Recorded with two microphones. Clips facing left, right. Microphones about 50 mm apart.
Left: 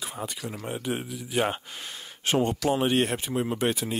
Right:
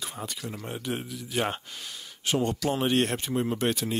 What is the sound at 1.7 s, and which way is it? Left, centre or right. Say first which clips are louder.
Speech: left 2 dB; left.